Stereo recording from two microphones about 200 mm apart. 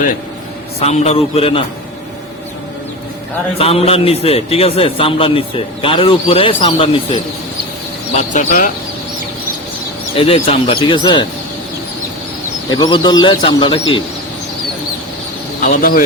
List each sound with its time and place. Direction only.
0.8 s a man's voice: 30° left (ahead or behind)
3.6 s a man's voice: 30° left (ahead or behind)
8.1 s speech: 35° left (ahead or behind)
10.2 s a man's voice: 30° left (ahead or behind)
12.7 s a man's voice: 20° left (ahead or behind)
15.6 s a man's voice: 45° left (ahead or behind)